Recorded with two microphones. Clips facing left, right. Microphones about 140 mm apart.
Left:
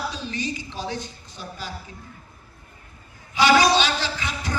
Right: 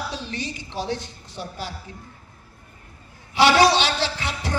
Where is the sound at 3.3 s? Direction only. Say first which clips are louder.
Right 1 dB; 65° right (ahead or behind).